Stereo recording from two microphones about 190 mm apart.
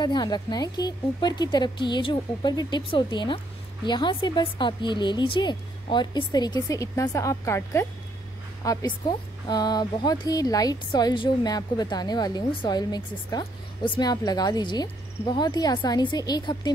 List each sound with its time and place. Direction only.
0.0 s a woman's voice: 20° left (ahead or behind)